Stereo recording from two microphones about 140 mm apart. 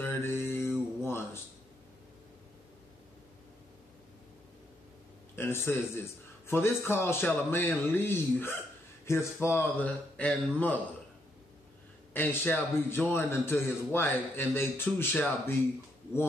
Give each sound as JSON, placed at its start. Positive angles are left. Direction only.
{"t": 0.0, "sound": "mantra", "side_deg": 15}
{"t": 1.0, "sound": "a sound", "side_deg": 15}
{"t": 5.3, "sound": "a man's voice", "side_deg": 15}
{"t": 12.1, "sound": "a man's voice", "side_deg": 15}